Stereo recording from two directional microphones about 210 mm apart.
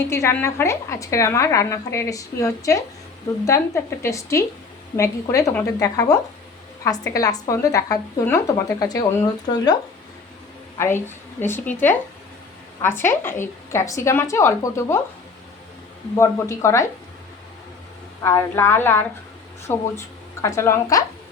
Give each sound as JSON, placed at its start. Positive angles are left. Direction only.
{"t": 0.1, "sound": "a woman's voice", "side_deg": 15}
{"t": 10.8, "sound": "a woman's voice", "side_deg": 10}
{"t": 16.1, "sound": "a woman's voice", "side_deg": 15}
{"t": 18.2, "sound": "a woman's voice", "side_deg": 15}